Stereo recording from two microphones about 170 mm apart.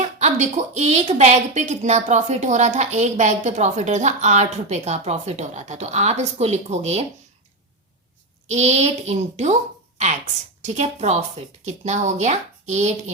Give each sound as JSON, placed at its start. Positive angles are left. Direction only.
{"t": 0.0, "sound": "a woman's voice", "side_deg": -45}
{"t": 8.4, "sound": "speech", "side_deg": -40}
{"t": 10.7, "sound": "speech", "side_deg": -40}